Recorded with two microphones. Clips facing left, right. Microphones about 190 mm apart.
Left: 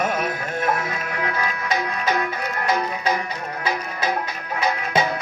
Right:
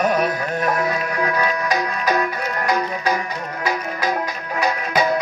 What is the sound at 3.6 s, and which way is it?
Music, 40° right (ahead or behind).